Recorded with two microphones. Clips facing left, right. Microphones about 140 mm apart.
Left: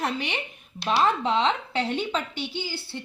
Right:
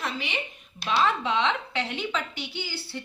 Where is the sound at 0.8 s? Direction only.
35° left (ahead or behind).